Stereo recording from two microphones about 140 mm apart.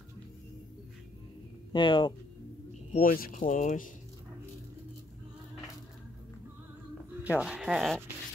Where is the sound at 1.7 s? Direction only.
35° left (ahead or behind).